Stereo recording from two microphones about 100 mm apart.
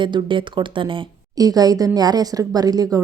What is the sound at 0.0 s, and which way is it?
Speech, 55° right (ahead or behind).